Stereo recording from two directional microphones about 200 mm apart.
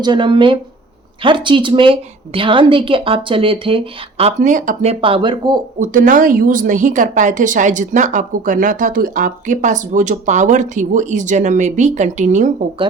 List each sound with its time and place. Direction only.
0.0 s a woman's voice: 25° right (ahead or behind)
5.8 s a woman's voice: 40° right (ahead or behind)